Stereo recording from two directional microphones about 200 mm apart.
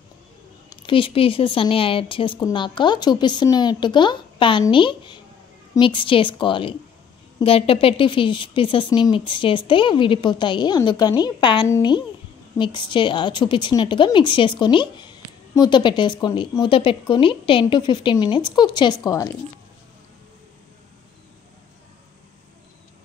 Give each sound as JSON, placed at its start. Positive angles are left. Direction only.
{"t": 0.7, "sound": "a woman's voice", "side_deg": 25}